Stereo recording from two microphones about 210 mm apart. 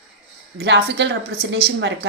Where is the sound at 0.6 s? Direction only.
55° right (ahead or behind).